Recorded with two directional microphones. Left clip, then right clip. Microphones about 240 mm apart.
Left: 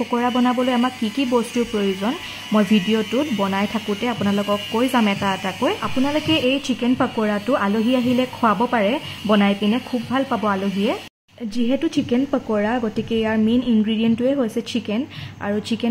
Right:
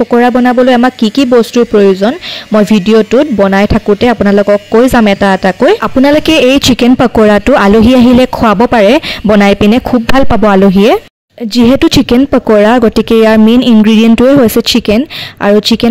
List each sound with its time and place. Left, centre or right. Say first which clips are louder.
0.1 s speech: right 11 dB; right
6.3 s a woman's voice: right 14 dB; right